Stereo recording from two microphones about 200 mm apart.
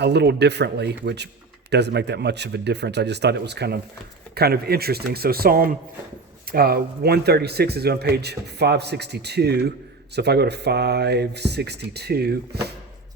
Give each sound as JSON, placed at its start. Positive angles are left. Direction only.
{"t": 0.0, "sound": "speech", "side_deg": -55}